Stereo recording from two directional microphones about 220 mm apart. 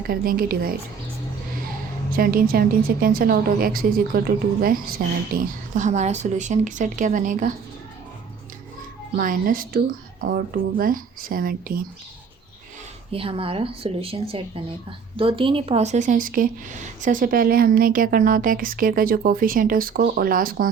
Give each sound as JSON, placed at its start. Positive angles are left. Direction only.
{"t": 0.1, "sound": "a woman's voice", "side_deg": -40}
{"t": 2.1, "sound": "speech", "side_deg": -40}
{"t": 9.1, "sound": "speech", "side_deg": -40}
{"t": 13.1, "sound": "speech", "side_deg": -25}